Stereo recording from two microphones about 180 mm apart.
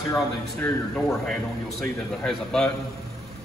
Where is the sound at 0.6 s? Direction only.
Centre (ahead or behind).